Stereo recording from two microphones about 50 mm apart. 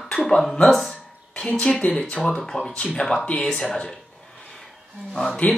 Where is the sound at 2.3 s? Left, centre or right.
Centre.